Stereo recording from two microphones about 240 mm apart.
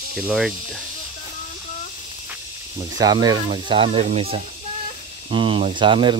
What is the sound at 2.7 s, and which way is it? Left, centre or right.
Speech, centre.